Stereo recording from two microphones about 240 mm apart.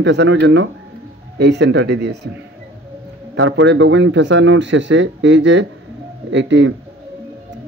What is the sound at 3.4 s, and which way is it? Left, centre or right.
Speech, right.